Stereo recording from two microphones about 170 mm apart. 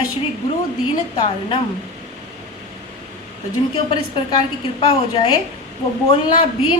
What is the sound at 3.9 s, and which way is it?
Speech, 30° left (ahead or behind).